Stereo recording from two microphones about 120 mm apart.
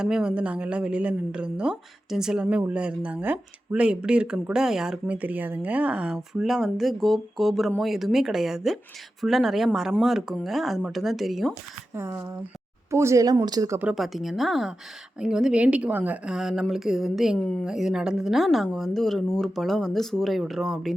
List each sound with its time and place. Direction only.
0.0 s a woman's voice: 5° right (ahead or behind)
11.9 s speech: 25° right (ahead or behind)
13.9 s a woman's voice: centre (ahead or behind)